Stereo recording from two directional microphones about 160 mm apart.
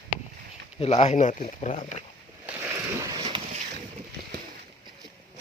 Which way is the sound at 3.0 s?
25° right (ahead or behind).